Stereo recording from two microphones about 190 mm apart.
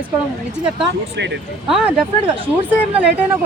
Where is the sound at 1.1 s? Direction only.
65° right (ahead or behind).